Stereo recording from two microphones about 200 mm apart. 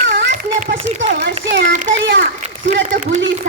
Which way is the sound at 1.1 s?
55° right (ahead or behind).